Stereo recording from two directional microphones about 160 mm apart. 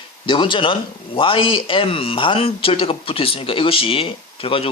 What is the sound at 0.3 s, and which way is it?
A man's voice, 30° left (ahead or behind).